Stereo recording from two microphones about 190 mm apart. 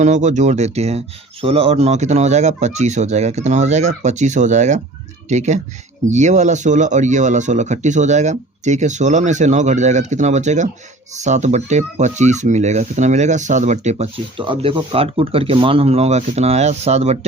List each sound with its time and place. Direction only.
0.0 s speech: 40° right (ahead or behind)